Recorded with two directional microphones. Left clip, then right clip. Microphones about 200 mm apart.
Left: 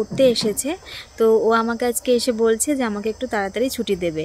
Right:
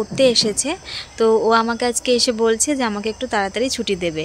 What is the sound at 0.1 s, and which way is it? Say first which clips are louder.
Speech: right 2 dB; 5° left (ahead or behind).